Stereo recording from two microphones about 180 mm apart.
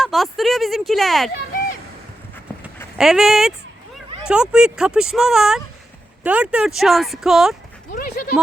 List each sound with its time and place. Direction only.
0.0 s speech: centre (ahead or behind)
3.0 s speech: centre (ahead or behind)
7.9 s a sound: 50° left (ahead or behind)